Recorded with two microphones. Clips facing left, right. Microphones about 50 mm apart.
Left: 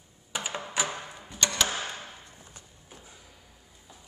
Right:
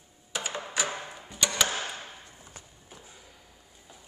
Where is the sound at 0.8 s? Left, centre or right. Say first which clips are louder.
Right 1 dB; centre.